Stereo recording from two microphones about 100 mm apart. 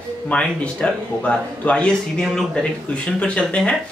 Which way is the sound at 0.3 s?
10° left (ahead or behind).